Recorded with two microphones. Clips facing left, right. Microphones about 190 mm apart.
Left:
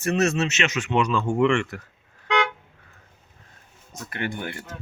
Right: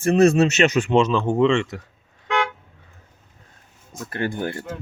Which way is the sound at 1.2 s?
20° right (ahead or behind).